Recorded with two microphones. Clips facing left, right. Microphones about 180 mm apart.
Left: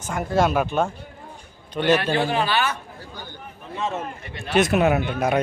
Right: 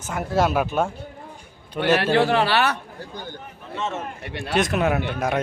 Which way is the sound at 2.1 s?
75° right (ahead or behind).